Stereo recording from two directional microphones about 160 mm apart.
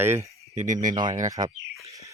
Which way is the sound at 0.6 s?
55° right (ahead or behind).